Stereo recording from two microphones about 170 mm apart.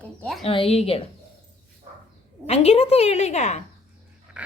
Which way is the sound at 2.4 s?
40° left (ahead or behind).